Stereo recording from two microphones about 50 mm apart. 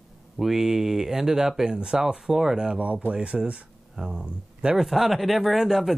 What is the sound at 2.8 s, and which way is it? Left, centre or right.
Speech, right.